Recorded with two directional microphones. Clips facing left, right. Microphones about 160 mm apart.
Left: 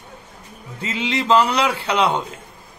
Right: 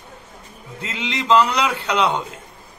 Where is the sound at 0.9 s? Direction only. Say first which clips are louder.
Left 1 dB; 5° left (ahead or behind).